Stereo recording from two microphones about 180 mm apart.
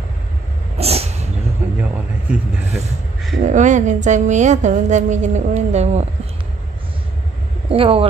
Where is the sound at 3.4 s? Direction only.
45° right (ahead or behind).